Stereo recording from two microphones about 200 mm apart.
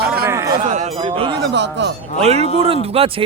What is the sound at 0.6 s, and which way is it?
Speech, 35° right (ahead or behind).